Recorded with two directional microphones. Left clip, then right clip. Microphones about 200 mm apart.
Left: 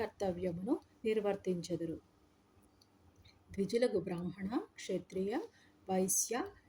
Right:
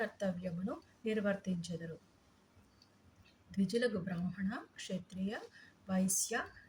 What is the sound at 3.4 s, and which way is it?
Speech, 40° left (ahead or behind).